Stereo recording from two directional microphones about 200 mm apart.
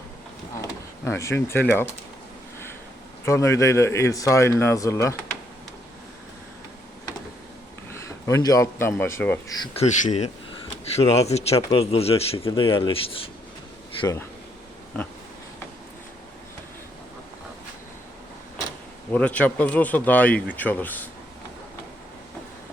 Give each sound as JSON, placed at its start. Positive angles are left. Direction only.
{"t": 0.6, "sound": "speech", "side_deg": 15}
{"t": 3.2, "sound": "speech", "side_deg": 15}
{"t": 7.9, "sound": "speech", "side_deg": 15}
{"t": 9.7, "sound": "speech", "side_deg": 35}
{"t": 14.0, "sound": "speech", "side_deg": 15}
{"t": 19.1, "sound": "speech", "side_deg": 5}